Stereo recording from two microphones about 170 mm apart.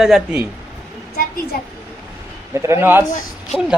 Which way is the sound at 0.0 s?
5° right (ahead or behind).